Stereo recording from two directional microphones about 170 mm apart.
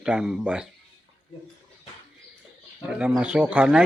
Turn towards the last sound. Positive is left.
turn(degrees=-5)  # may be behind; listen again after turning